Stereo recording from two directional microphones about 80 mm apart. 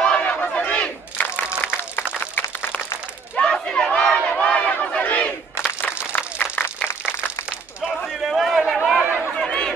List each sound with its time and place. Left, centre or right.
0.0 s crowd: centre
1.6 s applause: left
3.3 s crowd: centre
6.1 s a sound: left
8.1 s a sound: centre
9.0 s chatter: right
9.3 s chatter: centre